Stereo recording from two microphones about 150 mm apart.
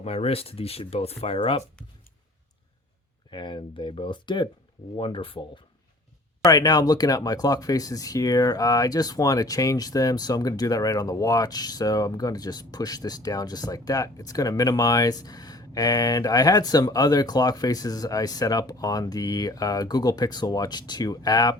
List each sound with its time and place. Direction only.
0.0 s speech: 40° left (ahead or behind)
3.2 s speech: 30° left (ahead or behind)
6.4 s speech: 25° left (ahead or behind)